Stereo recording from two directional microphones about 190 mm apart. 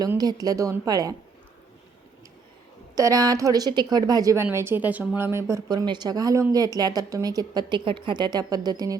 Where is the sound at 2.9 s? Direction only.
20° right (ahead or behind).